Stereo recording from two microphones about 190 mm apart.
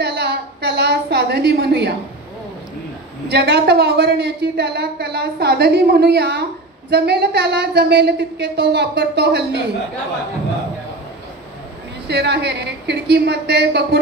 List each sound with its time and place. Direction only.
0.0 s a sound: 60° right (ahead or behind)
3.3 s a woman's voice: 60° right (ahead or behind)
12.1 s a woman's voice: 65° right (ahead or behind)